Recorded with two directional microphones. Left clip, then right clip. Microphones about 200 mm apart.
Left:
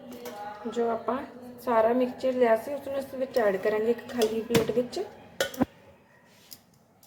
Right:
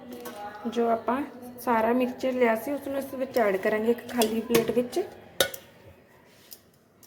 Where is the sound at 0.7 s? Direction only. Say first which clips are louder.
Right 3 dB; 20° right (ahead or behind).